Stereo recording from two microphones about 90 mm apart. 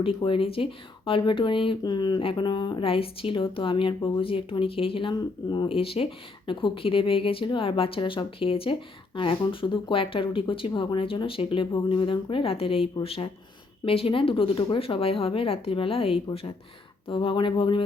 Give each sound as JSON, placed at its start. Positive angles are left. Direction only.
{"t": 0.0, "sound": "speech", "side_deg": 70}
{"t": 1.8, "sound": "speech", "side_deg": 55}
{"t": 8.4, "sound": "speech", "side_deg": 90}
{"t": 9.1, "sound": "speech", "side_deg": 75}
{"t": 17.1, "sound": "speech", "side_deg": 70}